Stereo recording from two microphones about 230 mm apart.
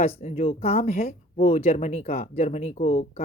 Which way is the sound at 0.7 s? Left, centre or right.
Left.